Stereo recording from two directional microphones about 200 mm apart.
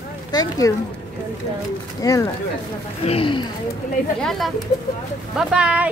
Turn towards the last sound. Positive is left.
turn(degrees=-5)  # may be behind; listen again after turning